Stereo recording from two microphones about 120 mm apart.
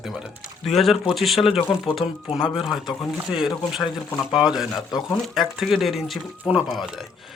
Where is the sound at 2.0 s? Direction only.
55° left (ahead or behind).